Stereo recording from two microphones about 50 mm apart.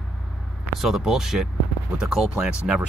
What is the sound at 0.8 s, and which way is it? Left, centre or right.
Speech, centre.